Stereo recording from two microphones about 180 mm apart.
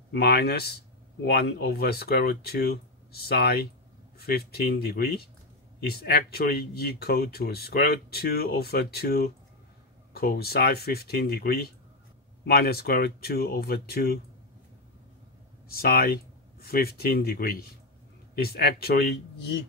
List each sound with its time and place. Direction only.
0.2 s speech: 60° left (ahead or behind)
15.7 s speech: 55° left (ahead or behind)